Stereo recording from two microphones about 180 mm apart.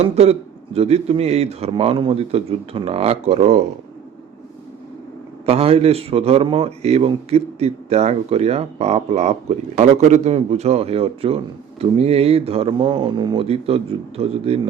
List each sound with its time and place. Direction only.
0.0 s a man's voice: 35° right (ahead or behind)
5.5 s a man's voice: 35° right (ahead or behind)